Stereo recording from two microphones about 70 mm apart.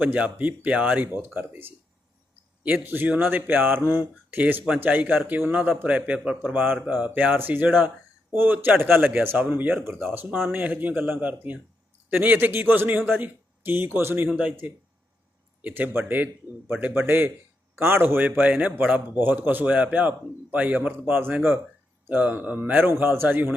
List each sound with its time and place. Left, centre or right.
0.0 s a man's voice: right
1.0 s a man's voice: right
6.5 s a man's voice: right
14.3 s a man's voice: centre